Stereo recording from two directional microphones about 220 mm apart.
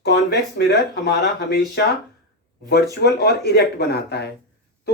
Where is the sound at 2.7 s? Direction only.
50° left (ahead or behind).